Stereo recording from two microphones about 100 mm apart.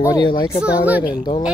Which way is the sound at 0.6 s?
15° right (ahead or behind).